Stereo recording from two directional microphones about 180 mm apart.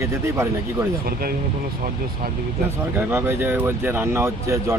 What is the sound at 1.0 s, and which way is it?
Speech, 55° right (ahead or behind).